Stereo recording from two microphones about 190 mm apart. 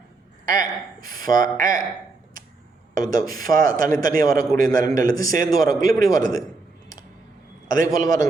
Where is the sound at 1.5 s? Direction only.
45° right (ahead or behind).